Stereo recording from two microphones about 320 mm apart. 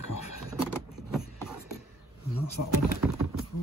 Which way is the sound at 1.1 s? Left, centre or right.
Centre.